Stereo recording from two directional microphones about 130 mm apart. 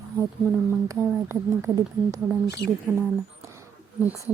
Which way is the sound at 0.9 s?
25° right (ahead or behind).